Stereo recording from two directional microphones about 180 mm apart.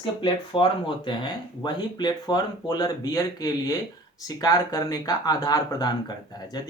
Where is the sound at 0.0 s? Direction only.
25° left (ahead or behind).